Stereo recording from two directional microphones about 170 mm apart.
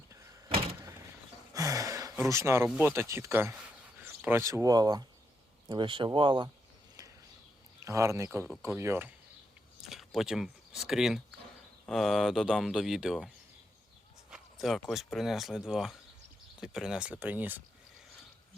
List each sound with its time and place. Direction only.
0.4 s vehicle: 35° right (ahead or behind)
0.8 s power windows: 15° right (ahead or behind)
1.5 s a sound: 20° right (ahead or behind)
2.6 s speech: 10° right (ahead or behind); by 6.5 s 30° right (ahead or behind)
7.9 s speech: 20° right (ahead or behind)
9.8 s speech: centre (ahead or behind)